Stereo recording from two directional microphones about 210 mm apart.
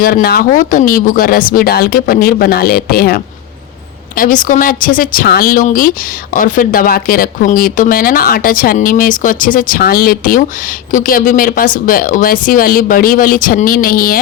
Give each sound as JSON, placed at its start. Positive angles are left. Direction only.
{"t": 0.0, "sound": "speech", "side_deg": 45}